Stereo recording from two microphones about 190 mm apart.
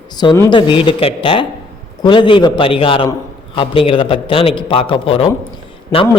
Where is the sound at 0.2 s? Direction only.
20° left (ahead or behind).